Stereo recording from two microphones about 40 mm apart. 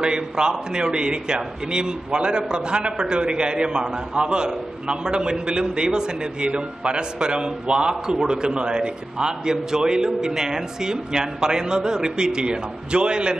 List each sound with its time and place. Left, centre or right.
0.0 s a man's voice: right